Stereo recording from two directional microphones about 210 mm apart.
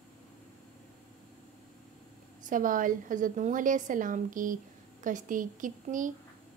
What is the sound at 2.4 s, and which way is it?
Speech, 40° right (ahead or behind).